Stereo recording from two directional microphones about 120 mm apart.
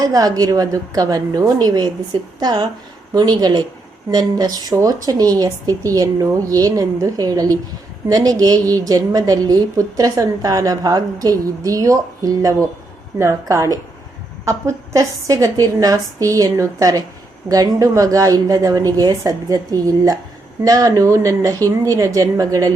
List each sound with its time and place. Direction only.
0.0 s a woman's voice: 30° right (ahead or behind)